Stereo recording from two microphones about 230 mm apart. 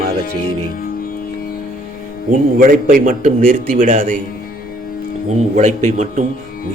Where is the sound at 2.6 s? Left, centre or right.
Right.